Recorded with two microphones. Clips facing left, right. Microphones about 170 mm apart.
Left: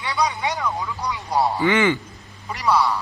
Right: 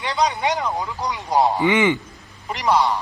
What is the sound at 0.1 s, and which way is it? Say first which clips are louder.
A man's voice: right 3 dB; 20° right (ahead or behind).